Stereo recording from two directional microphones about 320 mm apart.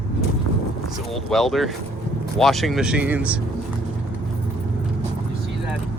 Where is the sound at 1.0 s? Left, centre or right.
Centre.